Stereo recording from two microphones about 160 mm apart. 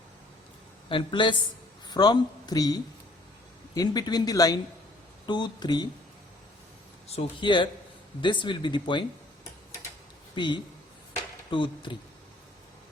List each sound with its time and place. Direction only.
0.9 s speech: 30° left (ahead or behind)
7.1 s speech: 30° left (ahead or behind)
10.3 s speech: 30° left (ahead or behind)